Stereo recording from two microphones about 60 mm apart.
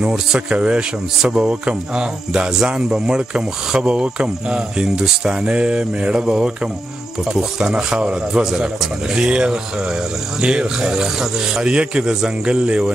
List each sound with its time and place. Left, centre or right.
0.0 s speech: centre